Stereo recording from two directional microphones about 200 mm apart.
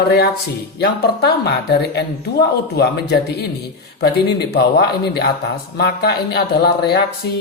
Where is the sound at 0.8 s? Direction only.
55° left (ahead or behind).